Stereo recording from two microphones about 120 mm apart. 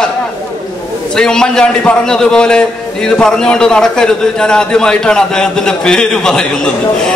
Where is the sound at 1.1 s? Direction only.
5° left (ahead or behind).